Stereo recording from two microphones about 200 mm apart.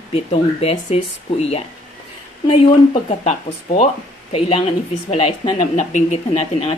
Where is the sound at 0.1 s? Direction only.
30° left (ahead or behind).